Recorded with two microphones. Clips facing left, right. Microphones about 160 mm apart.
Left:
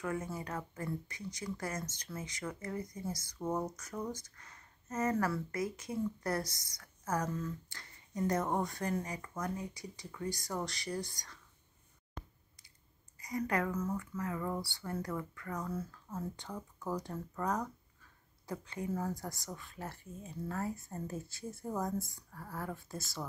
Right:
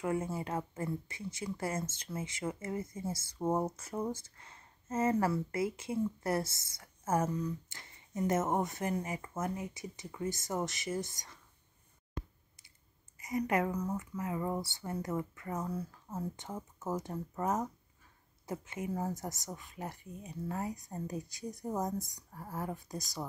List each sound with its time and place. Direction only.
0.0 s speech: 25° right (ahead or behind)
13.2 s speech: 20° right (ahead or behind)